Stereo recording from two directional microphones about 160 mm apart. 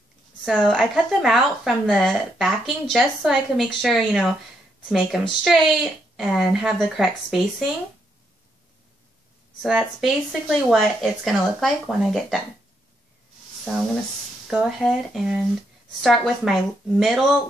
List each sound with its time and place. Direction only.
0.6 s a woman's voice: centre (ahead or behind)
9.6 s a woman's voice: centre (ahead or behind)
14.5 s a woman's voice: centre (ahead or behind)